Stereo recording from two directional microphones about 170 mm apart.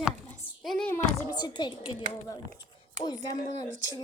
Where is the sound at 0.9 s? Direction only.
25° left (ahead or behind).